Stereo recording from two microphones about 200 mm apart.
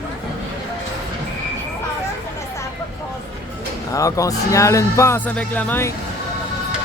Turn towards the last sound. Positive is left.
turn(degrees=10)  # may be behind; listen again after turning